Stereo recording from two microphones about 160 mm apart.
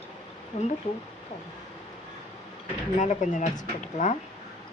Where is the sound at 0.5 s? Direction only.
40° left (ahead or behind).